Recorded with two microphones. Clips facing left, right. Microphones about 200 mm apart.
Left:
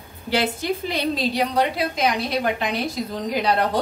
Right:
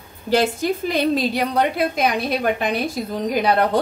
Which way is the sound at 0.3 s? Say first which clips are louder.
Right 4 dB; 45° right (ahead or behind).